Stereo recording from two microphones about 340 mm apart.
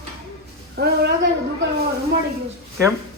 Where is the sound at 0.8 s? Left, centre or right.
Right.